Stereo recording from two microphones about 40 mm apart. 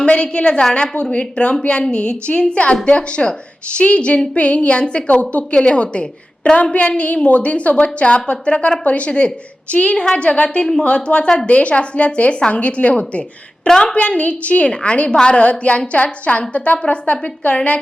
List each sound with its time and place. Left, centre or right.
0.0 s a woman's voice: left